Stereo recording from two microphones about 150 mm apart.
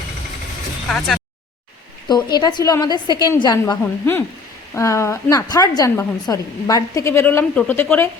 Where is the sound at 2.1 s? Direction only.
30° left (ahead or behind).